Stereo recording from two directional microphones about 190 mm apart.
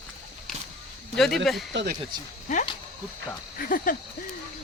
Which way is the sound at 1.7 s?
60° right (ahead or behind).